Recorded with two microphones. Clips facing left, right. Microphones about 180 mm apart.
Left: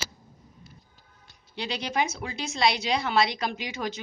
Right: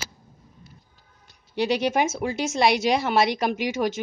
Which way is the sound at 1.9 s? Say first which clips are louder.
Right 5 dB; 50° right (ahead or behind).